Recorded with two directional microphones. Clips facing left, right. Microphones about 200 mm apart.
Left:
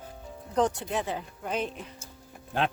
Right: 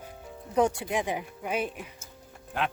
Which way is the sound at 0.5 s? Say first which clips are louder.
Right 1 dB; 10° right (ahead or behind).